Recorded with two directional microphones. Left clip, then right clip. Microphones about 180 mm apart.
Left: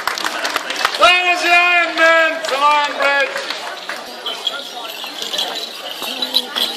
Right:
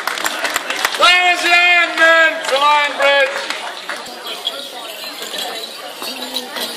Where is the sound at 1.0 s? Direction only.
45° left (ahead or behind).